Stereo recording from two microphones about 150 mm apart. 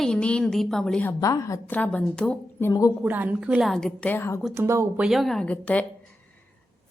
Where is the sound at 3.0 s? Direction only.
10° right (ahead or behind); by 4.4 s 15° left (ahead or behind).